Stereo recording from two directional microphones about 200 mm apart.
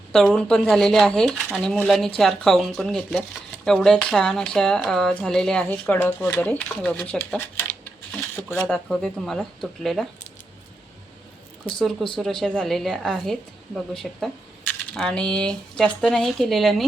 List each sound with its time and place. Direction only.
0.1 s speech: 5° left (ahead or behind)
11.8 s speech: centre (ahead or behind)